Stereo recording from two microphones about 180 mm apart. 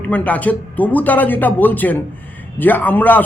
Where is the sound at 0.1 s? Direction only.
10° left (ahead or behind).